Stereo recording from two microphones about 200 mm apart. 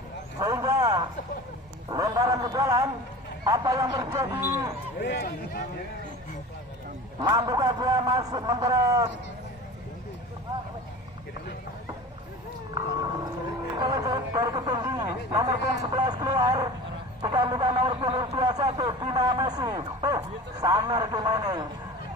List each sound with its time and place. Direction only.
0.4 s vehicle: 15° right (ahead or behind)
1.9 s a sound: 20° right (ahead or behind)
3.4 s speech: 20° right (ahead or behind)
5.0 s speech: 60° left (ahead or behind)
7.2 s speech: 20° right (ahead or behind)
12.7 s speech: 20° right (ahead or behind)